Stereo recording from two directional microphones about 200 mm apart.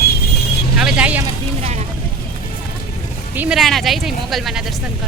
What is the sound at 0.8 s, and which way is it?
Speech, 5° right (ahead or behind).